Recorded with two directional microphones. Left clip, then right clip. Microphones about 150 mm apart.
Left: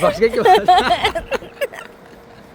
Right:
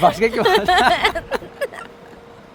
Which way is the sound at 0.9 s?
5° right (ahead or behind).